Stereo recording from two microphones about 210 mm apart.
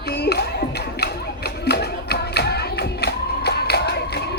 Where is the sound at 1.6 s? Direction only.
50° left (ahead or behind).